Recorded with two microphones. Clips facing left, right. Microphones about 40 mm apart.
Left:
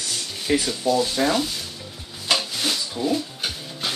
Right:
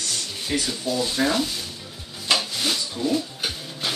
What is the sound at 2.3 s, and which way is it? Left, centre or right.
Printer, centre.